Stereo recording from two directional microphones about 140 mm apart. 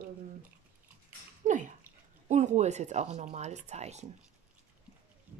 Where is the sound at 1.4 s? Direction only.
65° right (ahead or behind).